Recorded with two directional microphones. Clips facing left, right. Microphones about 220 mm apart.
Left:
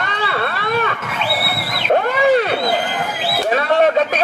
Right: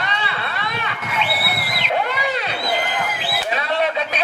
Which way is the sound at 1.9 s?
50° left (ahead or behind).